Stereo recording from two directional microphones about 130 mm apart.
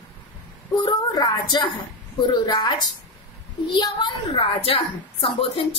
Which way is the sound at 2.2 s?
35° left (ahead or behind).